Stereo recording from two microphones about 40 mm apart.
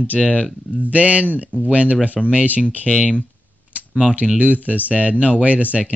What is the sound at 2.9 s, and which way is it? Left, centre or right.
Speech, centre.